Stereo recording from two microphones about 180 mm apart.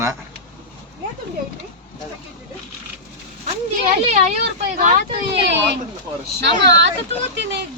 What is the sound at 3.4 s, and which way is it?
Speech, 35° right (ahead or behind).